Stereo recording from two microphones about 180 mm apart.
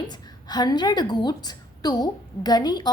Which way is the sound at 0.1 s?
25° left (ahead or behind).